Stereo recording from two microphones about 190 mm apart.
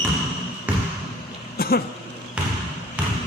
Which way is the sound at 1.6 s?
55° left (ahead or behind).